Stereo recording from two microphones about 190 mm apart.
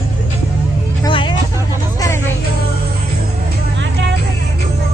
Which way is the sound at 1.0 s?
25° left (ahead or behind).